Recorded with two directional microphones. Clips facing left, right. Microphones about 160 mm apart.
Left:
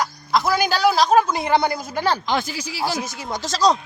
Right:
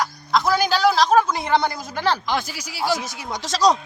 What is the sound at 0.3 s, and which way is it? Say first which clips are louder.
A man's voice: even; centre (ahead or behind).